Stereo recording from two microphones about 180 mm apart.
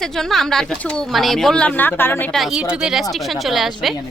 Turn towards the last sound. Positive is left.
turn(degrees=0)  # may be behind; listen again after turning